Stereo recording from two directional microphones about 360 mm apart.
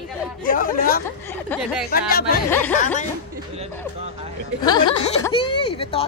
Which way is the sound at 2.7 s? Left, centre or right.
Left.